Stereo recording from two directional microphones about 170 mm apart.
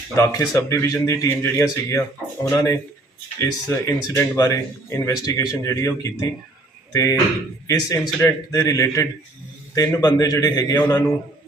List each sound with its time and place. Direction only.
0.2 s a man's voice: 15° left (ahead or behind)